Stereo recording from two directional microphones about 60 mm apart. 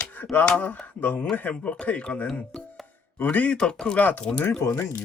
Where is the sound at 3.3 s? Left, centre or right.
Left.